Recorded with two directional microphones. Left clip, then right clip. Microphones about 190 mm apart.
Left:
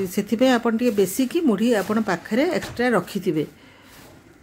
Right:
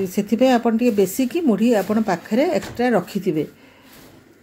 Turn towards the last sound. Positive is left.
turn(degrees=10)  # may be behind; listen again after turning